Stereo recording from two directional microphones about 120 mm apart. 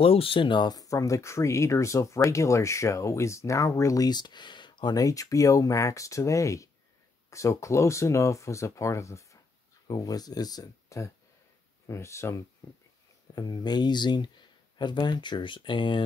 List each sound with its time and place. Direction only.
0.0 s speech: 50° left (ahead or behind); by 12.4 s 25° left (ahead or behind)
13.3 s speech: 35° left (ahead or behind)